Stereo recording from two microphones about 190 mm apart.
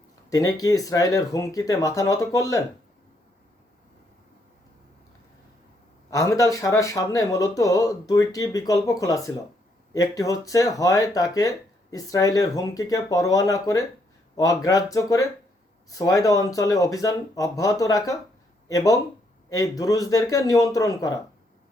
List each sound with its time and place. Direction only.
0.3 s speech: 20° left (ahead or behind)
6.1 s speech: 15° left (ahead or behind)